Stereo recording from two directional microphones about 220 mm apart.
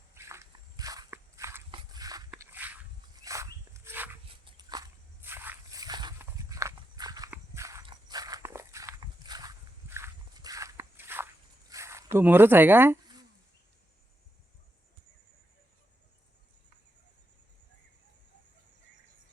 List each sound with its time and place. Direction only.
0.1 s walk: 10° right (ahead or behind)
1.7 s a sound: 15° right (ahead or behind)
3.2 s dog: 15° right (ahead or behind)
4.3 s walk: 20° right (ahead or behind)
11.7 s a sound: 15° right (ahead or behind)
12.1 s speech: 10° right (ahead or behind)